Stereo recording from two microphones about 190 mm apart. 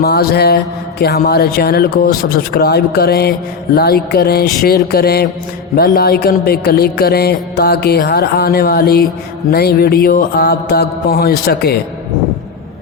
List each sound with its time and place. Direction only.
0.0 s music: 55° left (ahead or behind)